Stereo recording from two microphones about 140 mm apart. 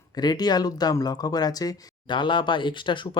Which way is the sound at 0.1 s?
30° left (ahead or behind).